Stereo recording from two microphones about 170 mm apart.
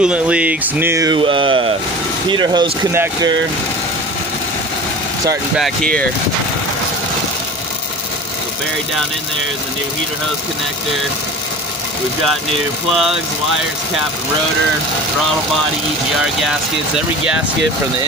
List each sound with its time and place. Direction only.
0.0 s speech: 5° right (ahead or behind); by 2.9 s 25° right (ahead or behind)
2.9 s speech: 15° right (ahead or behind)
5.6 s speech: 5° left (ahead or behind)
12.9 s speech: centre (ahead or behind)